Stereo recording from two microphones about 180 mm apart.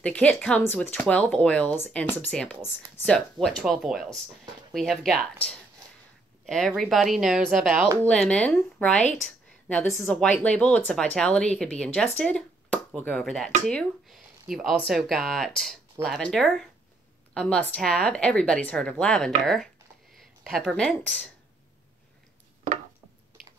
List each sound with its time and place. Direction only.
0.0 s speech: 5° left (ahead or behind)